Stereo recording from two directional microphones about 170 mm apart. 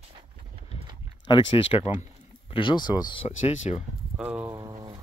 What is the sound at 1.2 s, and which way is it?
Speech, 25° left (ahead or behind).